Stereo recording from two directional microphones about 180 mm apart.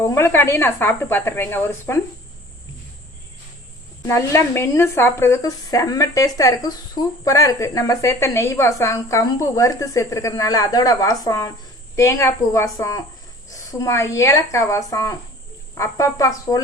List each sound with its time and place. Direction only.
0.0 s speech: 15° left (ahead or behind)
4.0 s speech: 15° left (ahead or behind)